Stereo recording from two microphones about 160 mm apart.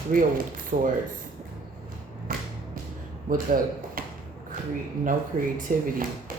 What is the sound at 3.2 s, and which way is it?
Speech, 60° right (ahead or behind).